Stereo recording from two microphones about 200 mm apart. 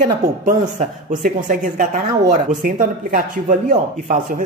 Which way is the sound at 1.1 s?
40° right (ahead or behind).